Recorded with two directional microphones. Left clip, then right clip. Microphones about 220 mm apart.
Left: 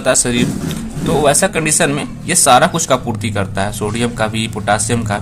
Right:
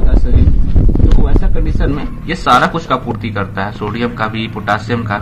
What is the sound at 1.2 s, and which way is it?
Speech, 35° left (ahead or behind).